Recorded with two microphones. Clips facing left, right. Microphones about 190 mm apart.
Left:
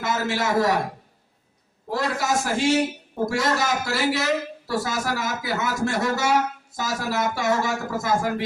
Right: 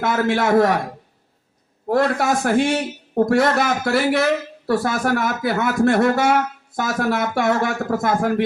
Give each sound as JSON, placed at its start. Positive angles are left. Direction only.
{"t": 0.0, "sound": "speech", "side_deg": -55}
{"t": 1.9, "sound": "speech", "side_deg": -55}